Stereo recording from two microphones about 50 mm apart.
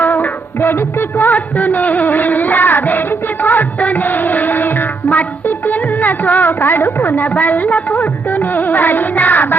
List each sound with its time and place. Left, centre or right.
0.0 s music: left